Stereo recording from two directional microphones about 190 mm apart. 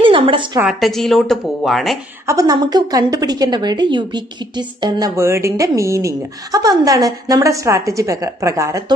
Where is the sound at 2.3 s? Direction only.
20° right (ahead or behind).